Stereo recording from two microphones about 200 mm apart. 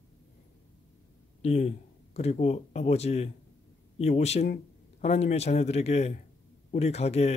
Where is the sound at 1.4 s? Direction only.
30° left (ahead or behind).